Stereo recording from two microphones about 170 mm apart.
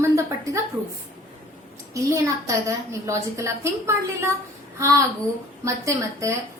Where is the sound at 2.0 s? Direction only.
20° right (ahead or behind).